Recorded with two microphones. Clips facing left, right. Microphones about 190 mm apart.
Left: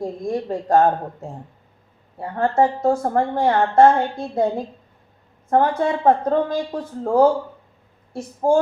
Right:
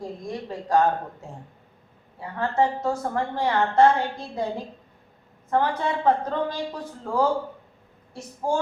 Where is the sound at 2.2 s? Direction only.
50° left (ahead or behind).